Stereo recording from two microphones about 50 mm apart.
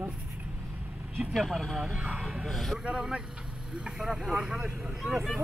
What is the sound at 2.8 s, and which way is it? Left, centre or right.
Speech, right.